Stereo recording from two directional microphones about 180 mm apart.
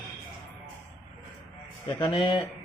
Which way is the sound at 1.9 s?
30° left (ahead or behind).